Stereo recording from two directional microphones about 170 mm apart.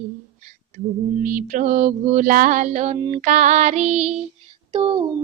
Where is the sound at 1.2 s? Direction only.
55° right (ahead or behind); by 4.2 s 40° right (ahead or behind).